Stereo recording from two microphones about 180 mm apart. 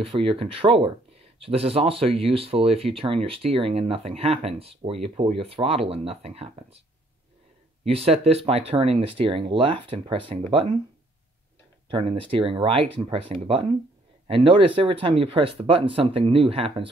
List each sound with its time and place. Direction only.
0.0 s speech: 30° right (ahead or behind)
7.8 s speech: 35° right (ahead or behind)
11.9 s speech: 30° right (ahead or behind)